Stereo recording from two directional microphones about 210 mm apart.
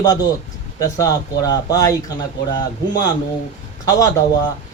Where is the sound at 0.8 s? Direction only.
15° left (ahead or behind).